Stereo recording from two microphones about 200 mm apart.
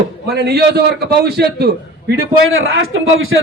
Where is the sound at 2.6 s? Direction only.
90° right.